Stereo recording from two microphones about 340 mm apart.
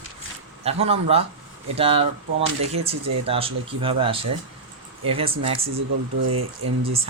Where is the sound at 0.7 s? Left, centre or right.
Centre.